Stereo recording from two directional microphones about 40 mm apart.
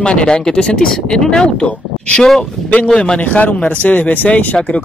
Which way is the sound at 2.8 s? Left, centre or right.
Left.